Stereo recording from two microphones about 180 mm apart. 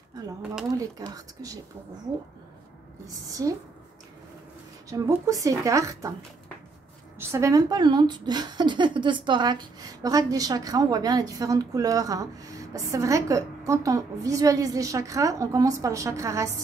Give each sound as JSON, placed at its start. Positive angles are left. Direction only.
{"t": 0.7, "sound": "speech", "side_deg": -20}
{"t": 3.1, "sound": "speech", "side_deg": -20}
{"t": 4.8, "sound": "a woman's voice", "side_deg": -20}
{"t": 7.2, "sound": "a woman's voice", "side_deg": -15}